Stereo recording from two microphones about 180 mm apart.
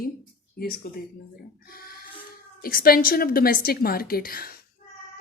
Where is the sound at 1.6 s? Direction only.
55° left (ahead or behind).